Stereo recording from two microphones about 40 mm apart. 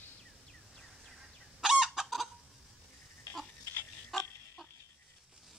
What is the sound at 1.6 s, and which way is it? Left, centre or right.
Fowl, centre.